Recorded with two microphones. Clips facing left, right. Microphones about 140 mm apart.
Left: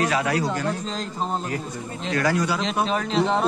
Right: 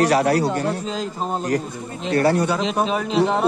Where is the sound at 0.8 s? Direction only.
5° right (ahead or behind).